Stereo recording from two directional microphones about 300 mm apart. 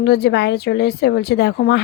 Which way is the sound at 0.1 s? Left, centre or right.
Left.